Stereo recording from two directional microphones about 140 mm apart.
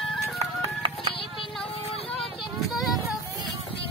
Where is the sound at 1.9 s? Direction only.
45° left (ahead or behind).